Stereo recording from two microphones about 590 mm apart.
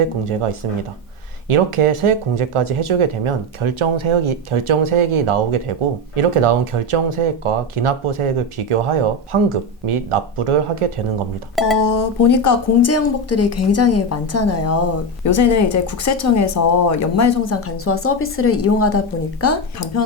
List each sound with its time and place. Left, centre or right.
1.5 s speech: right
11.8 s speech: left